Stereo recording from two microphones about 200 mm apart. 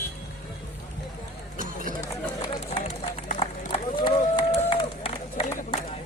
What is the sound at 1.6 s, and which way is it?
Run, 40° right (ahead or behind).